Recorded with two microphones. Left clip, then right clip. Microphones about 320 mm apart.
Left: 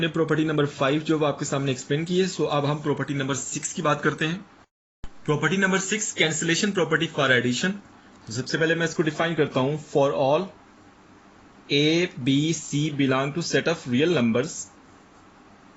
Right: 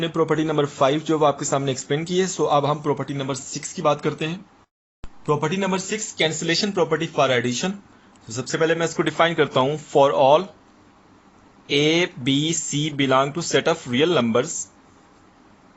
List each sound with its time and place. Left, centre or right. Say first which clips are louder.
0.0 s a man's voice: right 2 dB; centre
5.2 s a man's voice: right 1 dB; centre
11.7 s a man's voice: right 3 dB; right